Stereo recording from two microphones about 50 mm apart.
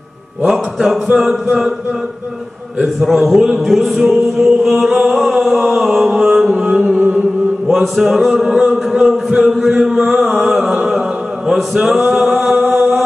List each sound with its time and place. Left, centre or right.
0.4 s music: centre
2.8 s a man's voice: centre
3.5 s music: centre
5.7 s a sound: centre
6.1 s music: centre
7.6 s mantra: centre
8.3 s music: centre
10.4 s a capella: centre